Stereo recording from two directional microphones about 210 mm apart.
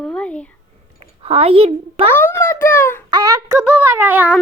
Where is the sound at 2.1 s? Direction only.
10° left (ahead or behind).